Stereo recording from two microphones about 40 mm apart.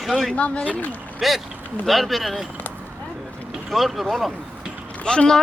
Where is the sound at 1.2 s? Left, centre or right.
Centre.